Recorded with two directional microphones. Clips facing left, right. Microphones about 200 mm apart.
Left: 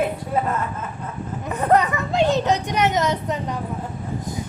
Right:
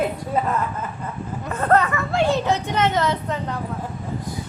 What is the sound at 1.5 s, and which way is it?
Speech, 15° left (ahead or behind).